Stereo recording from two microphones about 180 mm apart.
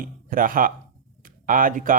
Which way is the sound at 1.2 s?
50° right (ahead or behind).